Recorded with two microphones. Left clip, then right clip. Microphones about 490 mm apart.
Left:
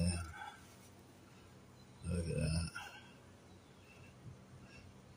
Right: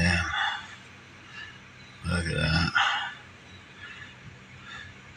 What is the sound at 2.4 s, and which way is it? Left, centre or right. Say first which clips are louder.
Speech: right 19 dB; left.